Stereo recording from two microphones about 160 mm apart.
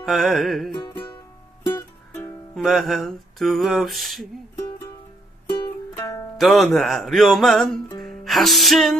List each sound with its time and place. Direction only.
0.0 s music: centre (ahead or behind)
0.7 s music: 30° left (ahead or behind)
2.5 s music: centre (ahead or behind)
5.5 s music: 25° left (ahead or behind)
6.3 s music: centre (ahead or behind)